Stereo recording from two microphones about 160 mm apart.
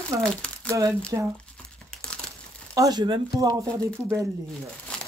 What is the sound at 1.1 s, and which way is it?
Speech, 20° right (ahead or behind).